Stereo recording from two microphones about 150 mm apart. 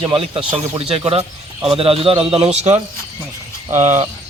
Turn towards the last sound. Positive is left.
turn(degrees=-50)  # may be behind; listen again after turning